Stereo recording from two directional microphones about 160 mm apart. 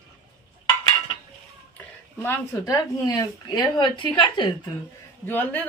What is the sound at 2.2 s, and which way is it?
Speech, 20° left (ahead or behind).